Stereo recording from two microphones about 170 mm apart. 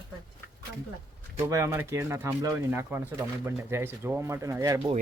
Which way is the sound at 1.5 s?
15° right (ahead or behind).